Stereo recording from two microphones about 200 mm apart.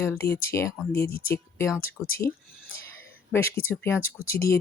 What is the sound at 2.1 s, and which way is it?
Speech, 50° left (ahead or behind).